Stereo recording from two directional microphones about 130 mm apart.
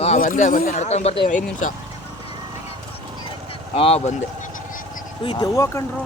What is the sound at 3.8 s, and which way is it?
Speech, 50° left (ahead or behind).